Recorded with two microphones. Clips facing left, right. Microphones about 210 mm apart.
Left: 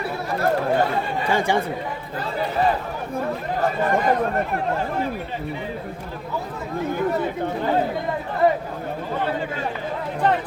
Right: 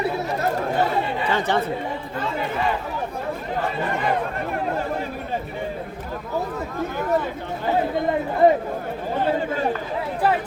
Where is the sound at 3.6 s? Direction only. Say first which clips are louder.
Left 5 dB; 40° left (ahead or behind).